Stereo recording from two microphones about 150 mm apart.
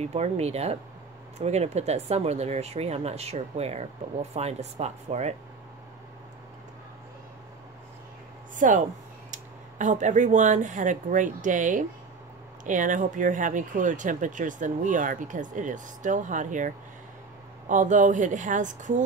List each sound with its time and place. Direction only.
0.0 s speech: 45° right (ahead or behind)
8.5 s speech: 60° right (ahead or behind)